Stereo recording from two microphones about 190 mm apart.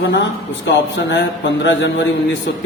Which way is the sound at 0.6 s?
65° left (ahead or behind).